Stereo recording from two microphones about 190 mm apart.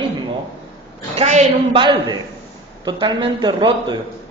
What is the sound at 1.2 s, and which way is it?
Speech, 35° right (ahead or behind).